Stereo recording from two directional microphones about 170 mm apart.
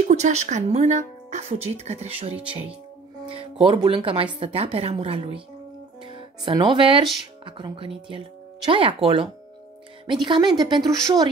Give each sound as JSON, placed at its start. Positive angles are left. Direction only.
{"t": 0.0, "sound": "a woman's voice", "side_deg": -40}